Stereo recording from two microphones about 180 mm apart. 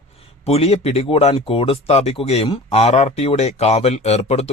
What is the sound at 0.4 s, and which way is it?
Speech, 35° left (ahead or behind).